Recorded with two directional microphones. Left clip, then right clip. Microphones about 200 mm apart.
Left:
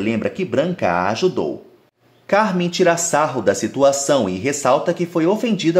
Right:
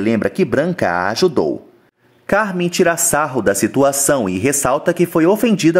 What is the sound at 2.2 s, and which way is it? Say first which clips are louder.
Speech: even; 35° right (ahead or behind).